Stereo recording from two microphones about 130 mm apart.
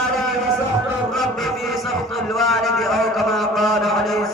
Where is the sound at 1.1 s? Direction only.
Centre (ahead or behind).